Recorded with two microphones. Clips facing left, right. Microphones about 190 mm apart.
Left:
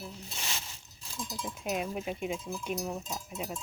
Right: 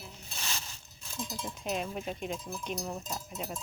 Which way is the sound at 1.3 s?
5° left (ahead or behind).